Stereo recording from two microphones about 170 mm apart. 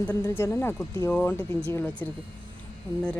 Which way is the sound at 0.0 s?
10° left (ahead or behind).